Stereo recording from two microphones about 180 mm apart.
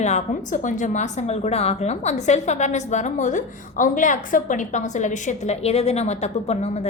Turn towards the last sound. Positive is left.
turn(degrees=35)  # may be behind; listen again after turning